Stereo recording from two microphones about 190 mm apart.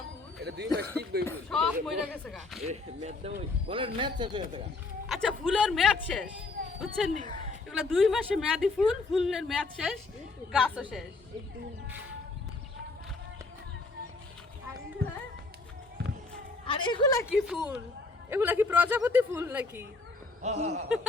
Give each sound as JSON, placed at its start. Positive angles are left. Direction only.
{"t": 0.3, "sound": "speech", "side_deg": -60}
{"t": 1.3, "sound": "speech", "side_deg": 5}
{"t": 2.6, "sound": "a man's voice", "side_deg": -35}
{"t": 5.0, "sound": "speech", "side_deg": 0}
{"t": 16.6, "sound": "a sound", "side_deg": 25}
{"t": 17.3, "sound": "speech", "side_deg": -5}
{"t": 20.4, "sound": "speech", "side_deg": -35}